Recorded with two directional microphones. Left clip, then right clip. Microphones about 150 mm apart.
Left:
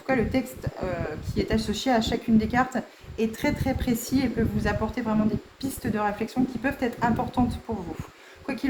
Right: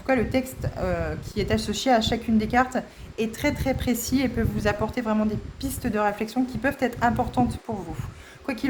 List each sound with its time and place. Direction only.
0.0 s speech: 50° right (ahead or behind)
8.5 s speech: 55° right (ahead or behind)